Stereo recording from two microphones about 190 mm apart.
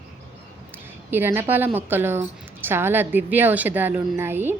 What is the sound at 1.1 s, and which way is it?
A woman's voice, 10° right (ahead or behind).